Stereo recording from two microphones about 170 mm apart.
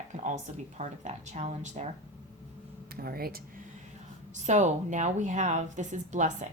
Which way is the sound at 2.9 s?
60° right (ahead or behind).